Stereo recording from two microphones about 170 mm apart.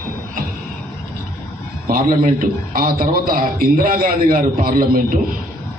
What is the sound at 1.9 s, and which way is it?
A man's voice, 55° right (ahead or behind).